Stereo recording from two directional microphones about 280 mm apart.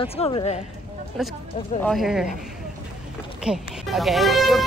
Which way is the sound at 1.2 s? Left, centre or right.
Centre.